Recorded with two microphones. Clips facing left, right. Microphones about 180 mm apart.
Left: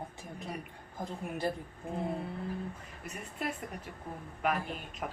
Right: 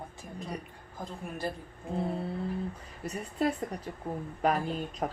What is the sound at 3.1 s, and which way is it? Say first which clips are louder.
A woman's voice: right 8 dB; 35° right (ahead or behind).